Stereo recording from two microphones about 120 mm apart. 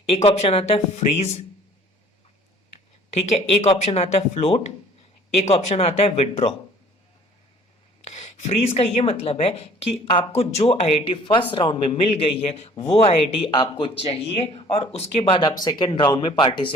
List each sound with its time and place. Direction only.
0.1 s a woman's voice: 55° left (ahead or behind)
3.2 s a woman's voice: 65° left (ahead or behind)
8.1 s a woman's voice: 70° left (ahead or behind); by 16.7 s 40° left (ahead or behind)